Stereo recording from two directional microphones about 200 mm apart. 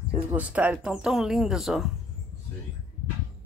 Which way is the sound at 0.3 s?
5° right (ahead or behind).